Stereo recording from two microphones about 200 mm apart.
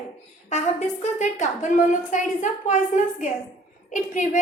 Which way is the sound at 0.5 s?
35° left (ahead or behind).